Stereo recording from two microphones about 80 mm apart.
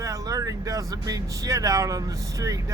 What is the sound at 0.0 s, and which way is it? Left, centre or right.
Speech, right.